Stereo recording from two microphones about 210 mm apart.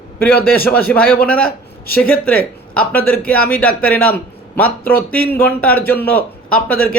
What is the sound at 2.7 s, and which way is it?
A man's voice, 5° left (ahead or behind).